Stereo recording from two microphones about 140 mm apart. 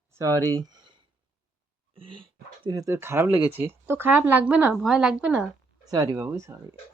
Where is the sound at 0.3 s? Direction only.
25° right (ahead or behind).